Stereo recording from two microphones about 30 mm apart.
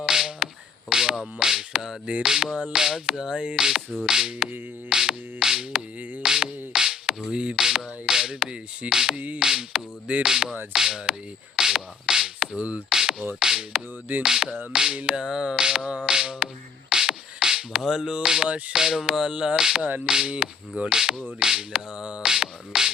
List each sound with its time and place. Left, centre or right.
0.0 s music: right
2.5 s speech: right
2.7 s music: right
7.2 s music: right
7.6 s music: right
11.5 s beatboxing: right
12.5 s speech: right
12.9 s beatboxing: right
13.1 s music: right
19.3 s music: right